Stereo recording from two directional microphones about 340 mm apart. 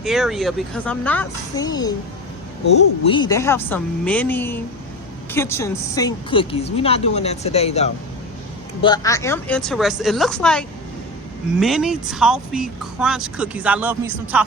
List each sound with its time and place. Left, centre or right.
0.0 s speech: centre
3.1 s a woman's voice: centre